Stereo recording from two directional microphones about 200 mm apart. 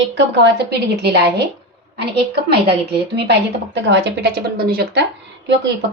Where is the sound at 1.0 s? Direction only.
55° right (ahead or behind).